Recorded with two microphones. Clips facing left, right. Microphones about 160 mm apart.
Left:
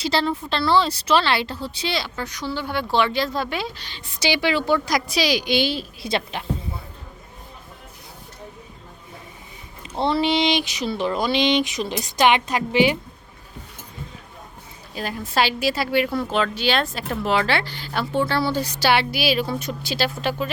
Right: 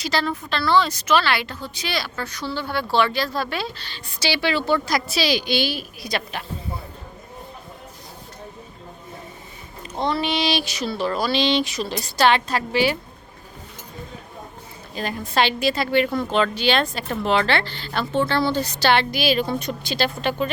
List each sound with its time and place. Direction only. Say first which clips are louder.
0.0 s a woman's voice: left 2 dB; 30° left (ahead or behind)
10.0 s speech: left 3 dB; 25° left (ahead or behind)
14.9 s a woman's voice: right 1 dB; 5° left (ahead or behind)